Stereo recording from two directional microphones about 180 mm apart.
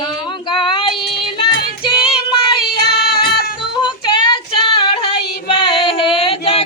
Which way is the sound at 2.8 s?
60° left (ahead or behind).